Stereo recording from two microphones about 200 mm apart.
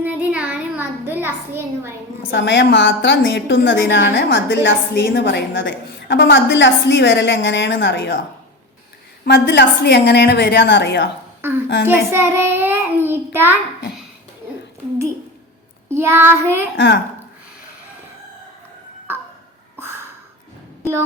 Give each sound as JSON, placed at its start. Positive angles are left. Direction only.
{"t": 0.0, "sound": "a sound", "side_deg": -10}
{"t": 2.2, "sound": "a woman's voice", "side_deg": 60}
{"t": 9.2, "sound": "a woman's voice", "side_deg": 55}
{"t": 11.9, "sound": "a child's voice", "side_deg": -10}
{"t": 15.9, "sound": "a child's voice", "side_deg": -15}
{"t": 16.7, "sound": "a woman's voice", "side_deg": 60}
{"t": 19.8, "sound": "a sound", "side_deg": -10}